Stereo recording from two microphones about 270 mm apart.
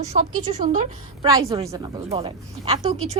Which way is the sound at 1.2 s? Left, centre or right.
Centre.